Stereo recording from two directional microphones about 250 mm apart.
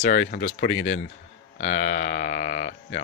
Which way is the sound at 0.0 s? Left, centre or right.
Left.